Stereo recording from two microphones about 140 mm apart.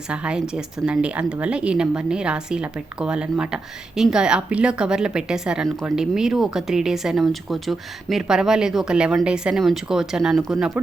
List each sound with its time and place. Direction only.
0.1 s speech: 5° right (ahead or behind)